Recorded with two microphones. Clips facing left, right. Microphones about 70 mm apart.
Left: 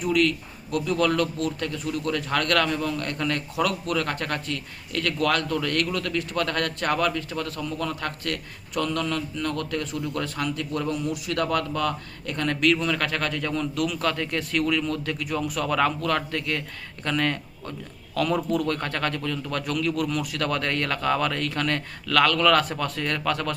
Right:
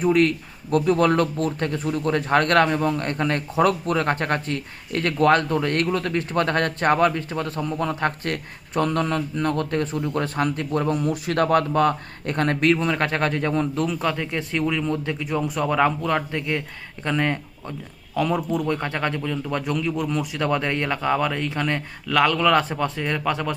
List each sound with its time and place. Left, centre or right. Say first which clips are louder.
0.0 s speech: right 4 dB; right
14.0 s speech: right 1 dB; centre